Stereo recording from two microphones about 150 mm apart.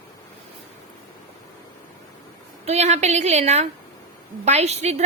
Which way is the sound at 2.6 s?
45° right (ahead or behind).